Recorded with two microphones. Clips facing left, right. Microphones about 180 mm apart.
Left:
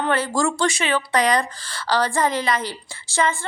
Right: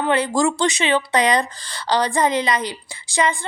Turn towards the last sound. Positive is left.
turn(degrees=-15)  # may be behind; listen again after turning